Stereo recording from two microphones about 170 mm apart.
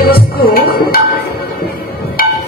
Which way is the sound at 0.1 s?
60° left (ahead or behind).